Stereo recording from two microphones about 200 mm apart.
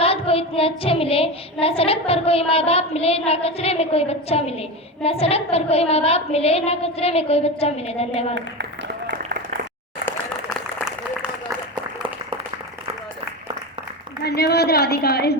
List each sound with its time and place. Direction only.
0.0 s child singing: 30° left (ahead or behind)
1.6 s a woman's voice: 30° left (ahead or behind)
14.3 s a woman's voice: 55° left (ahead or behind)